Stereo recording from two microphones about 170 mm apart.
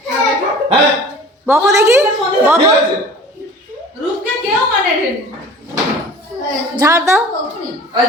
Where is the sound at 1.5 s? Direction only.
15° right (ahead or behind).